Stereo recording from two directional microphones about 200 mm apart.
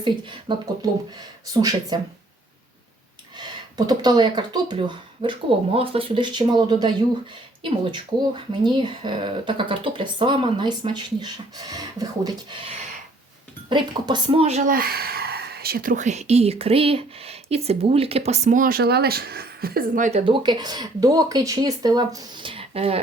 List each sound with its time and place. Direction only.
0.0 s speech: 25° right (ahead or behind)
3.3 s speech: 20° right (ahead or behind)
14.7 s speech: 45° right (ahead or behind)
20.1 s speech: 30° right (ahead or behind)